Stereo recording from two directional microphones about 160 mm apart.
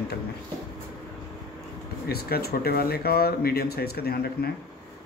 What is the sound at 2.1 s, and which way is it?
Speech, 75° left (ahead or behind).